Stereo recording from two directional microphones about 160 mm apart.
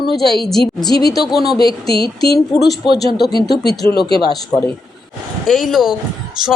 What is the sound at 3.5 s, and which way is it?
Speech, 90° left.